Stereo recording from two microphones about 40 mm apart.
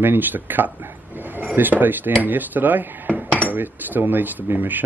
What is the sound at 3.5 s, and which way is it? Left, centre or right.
Speech, right.